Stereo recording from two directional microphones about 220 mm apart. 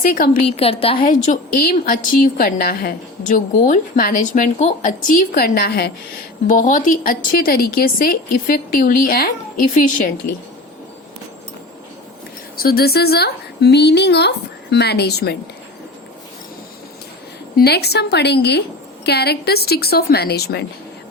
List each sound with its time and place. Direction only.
0.0 s a woman's voice: 40° left (ahead or behind)
0.4 s a woman's voice: 25° left (ahead or behind)
1.0 s a woman's voice: 35° left (ahead or behind)
12.5 s a woman's voice: 45° left (ahead or behind)
17.6 s speech: 45° left (ahead or behind)